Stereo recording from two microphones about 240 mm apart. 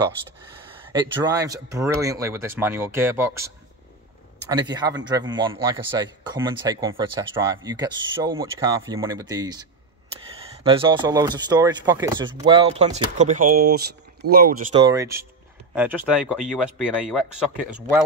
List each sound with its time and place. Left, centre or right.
0.9 s speech: centre
4.5 s speech: centre; by 14.7 s right
14.7 s speech: centre